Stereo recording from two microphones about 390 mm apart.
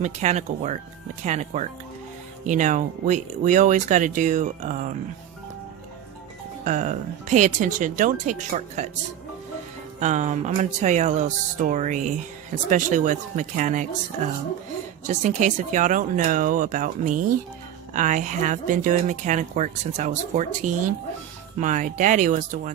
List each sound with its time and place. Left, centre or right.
0.0 s speech: centre
6.7 s speech: centre
10.0 s speech: centre
15.0 s speech: centre